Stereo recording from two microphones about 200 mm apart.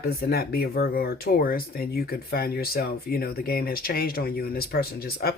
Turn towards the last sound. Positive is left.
turn(degrees=50)  # may be behind; listen again after turning